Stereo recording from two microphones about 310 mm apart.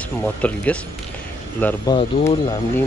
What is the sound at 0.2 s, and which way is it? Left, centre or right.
Speech, centre.